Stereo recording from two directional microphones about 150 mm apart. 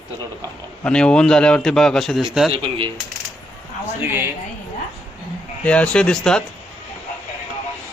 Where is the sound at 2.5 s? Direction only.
35° right (ahead or behind).